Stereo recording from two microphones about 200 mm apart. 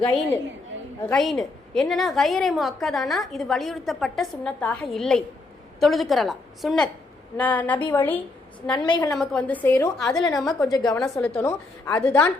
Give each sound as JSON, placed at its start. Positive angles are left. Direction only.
{"t": 1.0, "sound": "a woman's voice", "side_deg": 0}
{"t": 8.7, "sound": "a woman's voice", "side_deg": 20}
{"t": 9.1, "sound": "a woman's voice", "side_deg": 5}
{"t": 11.3, "sound": "a woman's voice", "side_deg": 15}